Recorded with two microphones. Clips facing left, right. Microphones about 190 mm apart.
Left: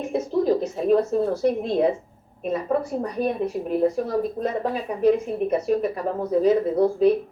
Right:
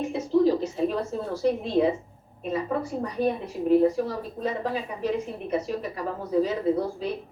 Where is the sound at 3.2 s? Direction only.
50° left (ahead or behind).